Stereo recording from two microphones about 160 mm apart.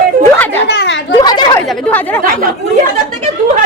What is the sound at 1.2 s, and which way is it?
Speech, 25° left (ahead or behind).